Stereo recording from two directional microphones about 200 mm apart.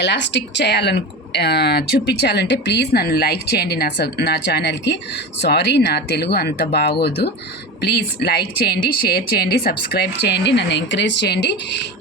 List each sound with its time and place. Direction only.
0.0 s speech: 60° left (ahead or behind)
7.8 s speech: 50° left (ahead or behind)